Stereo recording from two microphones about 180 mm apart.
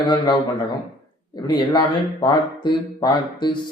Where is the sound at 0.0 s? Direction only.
20° left (ahead or behind).